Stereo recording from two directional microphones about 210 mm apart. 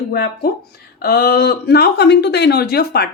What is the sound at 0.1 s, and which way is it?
Speech, 50° left (ahead or behind).